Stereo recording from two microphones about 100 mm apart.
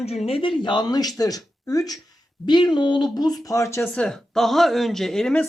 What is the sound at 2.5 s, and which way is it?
Speech, 50° left (ahead or behind).